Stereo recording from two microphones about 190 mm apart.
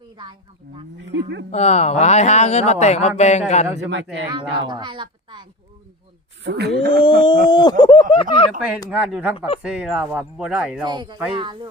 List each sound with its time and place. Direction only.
0.9 s a sound: 65° right (ahead or behind)
1.5 s speech: 35° left (ahead or behind)
3.8 s speech: 70° right (ahead or behind)
4.3 s a woman's voice: 25° right (ahead or behind)
6.4 s a sound: 65° right (ahead or behind)
7.0 s speech: 25° left (ahead or behind)
8.9 s speech: 5° right (ahead or behind)
10.8 s a woman's voice: 25° right (ahead or behind)